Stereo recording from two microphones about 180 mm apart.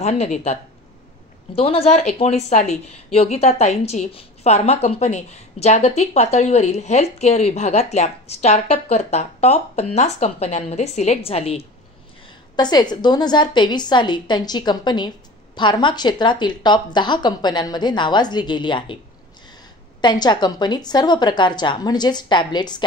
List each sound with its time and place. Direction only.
0.0 s a woman's voice: 40° left (ahead or behind)
12.5 s a woman's voice: 25° left (ahead or behind)
20.0 s a woman's voice: 25° left (ahead or behind)